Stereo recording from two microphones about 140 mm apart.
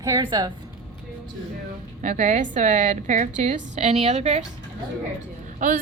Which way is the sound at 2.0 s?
60° right (ahead or behind).